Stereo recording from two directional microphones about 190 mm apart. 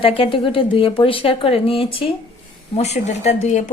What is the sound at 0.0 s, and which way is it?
A woman's voice, 30° left (ahead or behind).